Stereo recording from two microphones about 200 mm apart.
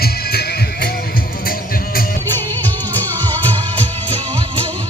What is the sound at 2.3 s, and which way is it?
Music, 10° left (ahead or behind).